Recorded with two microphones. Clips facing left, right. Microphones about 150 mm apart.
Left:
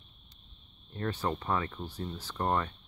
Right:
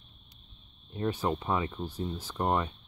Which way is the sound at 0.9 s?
15° right (ahead or behind).